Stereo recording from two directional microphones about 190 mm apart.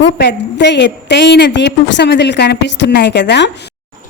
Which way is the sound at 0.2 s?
65° left (ahead or behind).